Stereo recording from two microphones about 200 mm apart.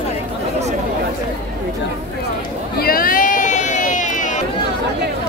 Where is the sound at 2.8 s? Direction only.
45° left (ahead or behind).